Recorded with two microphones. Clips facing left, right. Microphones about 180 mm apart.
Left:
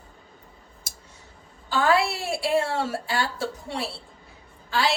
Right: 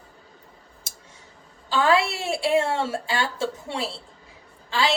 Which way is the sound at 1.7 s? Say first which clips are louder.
Right 1 dB; 25° right (ahead or behind).